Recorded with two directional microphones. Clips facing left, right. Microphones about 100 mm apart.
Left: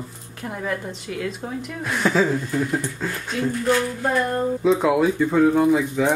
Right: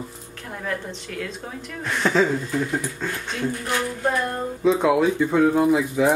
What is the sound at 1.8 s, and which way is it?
Speech, 5° left (ahead or behind).